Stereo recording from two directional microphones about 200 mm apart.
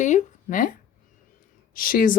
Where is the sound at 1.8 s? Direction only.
45° left (ahead or behind).